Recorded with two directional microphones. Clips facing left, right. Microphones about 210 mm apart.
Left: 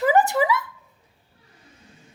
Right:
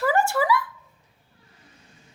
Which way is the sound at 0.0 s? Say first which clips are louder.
Left 3 dB; 20° left (ahead or behind).